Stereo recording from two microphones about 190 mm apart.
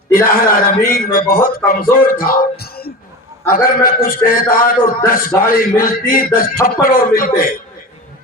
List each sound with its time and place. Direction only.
0.1 s a man's voice: 50° left (ahead or behind)